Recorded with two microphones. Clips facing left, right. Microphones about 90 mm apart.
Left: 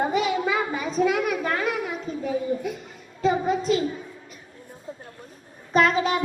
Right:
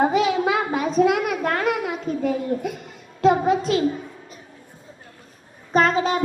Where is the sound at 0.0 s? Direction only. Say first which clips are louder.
Right 4 dB; 90° right.